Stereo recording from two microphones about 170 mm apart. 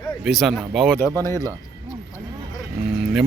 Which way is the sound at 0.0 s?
5° left (ahead or behind).